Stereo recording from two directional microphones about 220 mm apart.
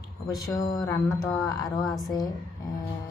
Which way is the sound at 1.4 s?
15° left (ahead or behind).